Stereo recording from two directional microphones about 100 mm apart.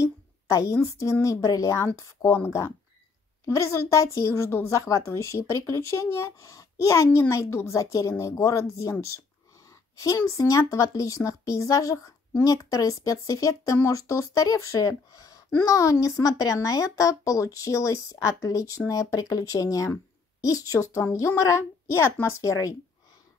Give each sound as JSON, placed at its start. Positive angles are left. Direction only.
{"t": 0.0, "sound": "a sound", "side_deg": 35}
{"t": 1.2, "sound": "a woman's voice", "side_deg": 35}
{"t": 9.9, "sound": "speech", "side_deg": 30}